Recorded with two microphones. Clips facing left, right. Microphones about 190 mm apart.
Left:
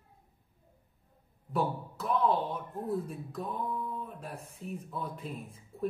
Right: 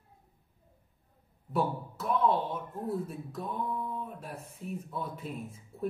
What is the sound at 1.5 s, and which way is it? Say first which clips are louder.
Speech: right 1 dB; centre (ahead or behind).